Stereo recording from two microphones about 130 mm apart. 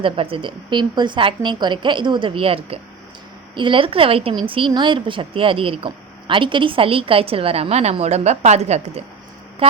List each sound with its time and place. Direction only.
0.0 s a woman's voice: 45° right (ahead or behind)